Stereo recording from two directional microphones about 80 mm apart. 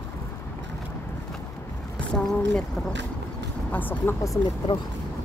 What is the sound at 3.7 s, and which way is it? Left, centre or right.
Speech, left.